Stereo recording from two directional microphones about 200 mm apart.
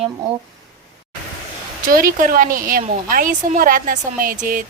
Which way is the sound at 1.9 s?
45° right (ahead or behind).